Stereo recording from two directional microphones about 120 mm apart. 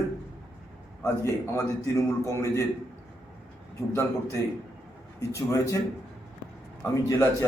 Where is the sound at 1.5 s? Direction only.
25° left (ahead or behind).